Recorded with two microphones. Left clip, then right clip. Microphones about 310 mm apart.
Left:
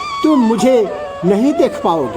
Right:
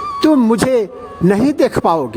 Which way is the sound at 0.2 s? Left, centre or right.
Right.